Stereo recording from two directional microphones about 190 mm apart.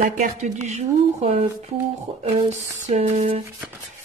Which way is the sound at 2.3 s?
35° right (ahead or behind).